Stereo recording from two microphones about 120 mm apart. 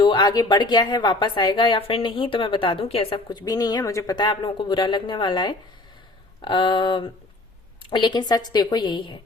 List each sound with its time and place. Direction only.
0.0 s a woman's voice: 40° left (ahead or behind)
3.2 s a woman's voice: 35° left (ahead or behind)